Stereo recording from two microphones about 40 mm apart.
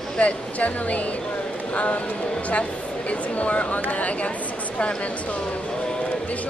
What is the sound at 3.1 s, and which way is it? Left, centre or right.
Speech, left.